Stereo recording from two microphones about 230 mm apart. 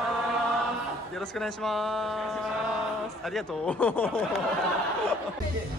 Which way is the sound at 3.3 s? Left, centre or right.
Centre.